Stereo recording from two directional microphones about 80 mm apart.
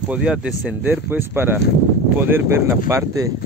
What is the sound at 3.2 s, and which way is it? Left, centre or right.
Speech, right.